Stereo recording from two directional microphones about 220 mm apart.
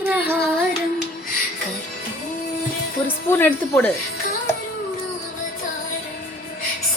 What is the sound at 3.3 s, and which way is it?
Dishes, 10° left (ahead or behind).